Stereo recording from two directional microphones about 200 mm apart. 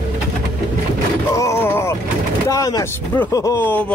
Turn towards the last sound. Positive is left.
turn(degrees=10)  # may be behind; listen again after turning